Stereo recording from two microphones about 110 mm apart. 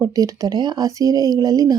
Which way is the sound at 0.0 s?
35° right (ahead or behind).